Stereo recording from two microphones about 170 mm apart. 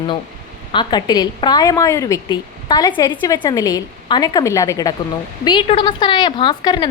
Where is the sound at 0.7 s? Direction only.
25° left (ahead or behind).